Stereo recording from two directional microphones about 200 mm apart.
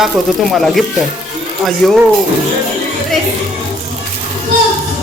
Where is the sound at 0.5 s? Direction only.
Centre (ahead or behind).